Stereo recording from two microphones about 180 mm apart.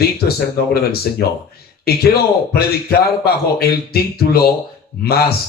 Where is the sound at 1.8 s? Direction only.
60° left (ahead or behind).